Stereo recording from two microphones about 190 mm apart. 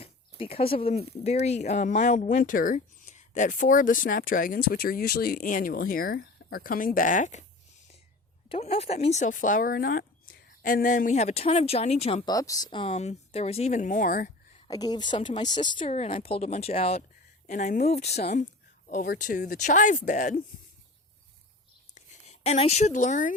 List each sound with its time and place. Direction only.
0.0 s speech: 30° left (ahead or behind)
8.4 s speech: 30° left (ahead or behind)
12.3 s speech: 20° left (ahead or behind); by 14.3 s 45° left (ahead or behind)
14.7 s speech: 20° left (ahead or behind)
15.8 s speech: 35° left (ahead or behind)
18.9 s speech: 50° left (ahead or behind)
21.9 s speech: 35° left (ahead or behind)